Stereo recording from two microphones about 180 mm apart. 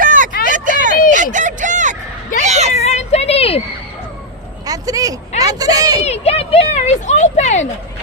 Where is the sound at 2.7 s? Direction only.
35° left (ahead or behind).